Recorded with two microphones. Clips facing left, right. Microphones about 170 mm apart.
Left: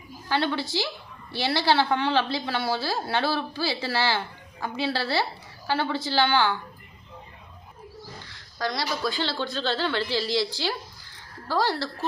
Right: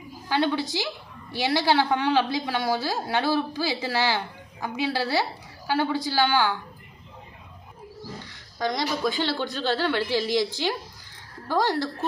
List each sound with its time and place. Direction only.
0.3 s a woman's voice: 15° right (ahead or behind)
8.5 s a woman's voice: 20° right (ahead or behind)